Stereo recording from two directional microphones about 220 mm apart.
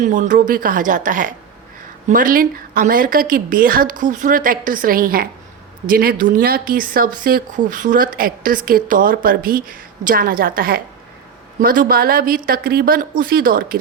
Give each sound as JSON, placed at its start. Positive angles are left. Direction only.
{"t": 0.0, "sound": "speech", "side_deg": -35}